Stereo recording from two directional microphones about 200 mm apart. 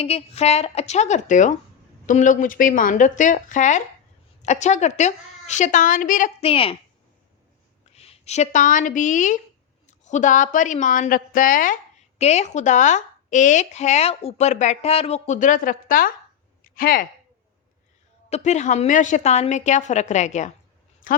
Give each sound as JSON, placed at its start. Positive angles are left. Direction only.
{"t": 0.0, "sound": "speech", "side_deg": 30}
{"t": 7.9, "sound": "speech", "side_deg": 30}
{"t": 18.3, "sound": "a woman's voice", "side_deg": 35}